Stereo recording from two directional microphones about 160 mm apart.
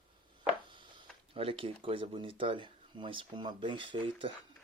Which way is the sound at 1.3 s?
35° right (ahead or behind).